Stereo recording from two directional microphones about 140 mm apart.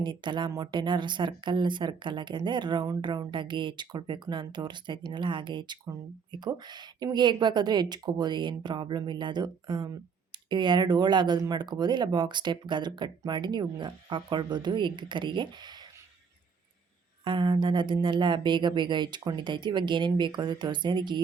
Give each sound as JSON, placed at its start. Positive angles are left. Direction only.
{"t": 0.0, "sound": "speech", "side_deg": -35}
{"t": 17.2, "sound": "speech", "side_deg": -35}